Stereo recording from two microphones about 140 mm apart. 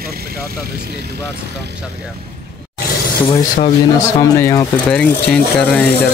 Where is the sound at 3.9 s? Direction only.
20° left (ahead or behind).